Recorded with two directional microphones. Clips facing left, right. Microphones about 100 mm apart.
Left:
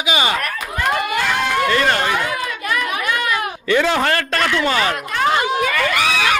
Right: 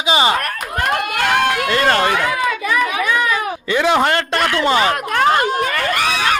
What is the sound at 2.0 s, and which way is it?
Speech, 70° right (ahead or behind).